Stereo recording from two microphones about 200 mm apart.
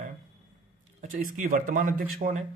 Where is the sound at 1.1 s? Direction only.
40° right (ahead or behind).